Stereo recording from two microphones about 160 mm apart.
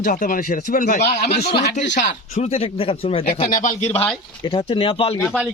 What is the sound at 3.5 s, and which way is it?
Speech, 55° left (ahead or behind).